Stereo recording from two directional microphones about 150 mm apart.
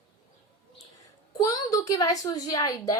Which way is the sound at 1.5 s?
25° left (ahead or behind).